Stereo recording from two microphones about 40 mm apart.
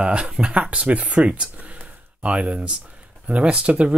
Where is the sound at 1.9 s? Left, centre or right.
Right.